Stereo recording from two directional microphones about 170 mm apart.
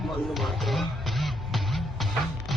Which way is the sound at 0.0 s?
Centre (ahead or behind).